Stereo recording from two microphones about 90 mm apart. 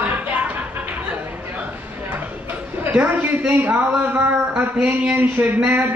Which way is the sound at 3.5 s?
20° right (ahead or behind).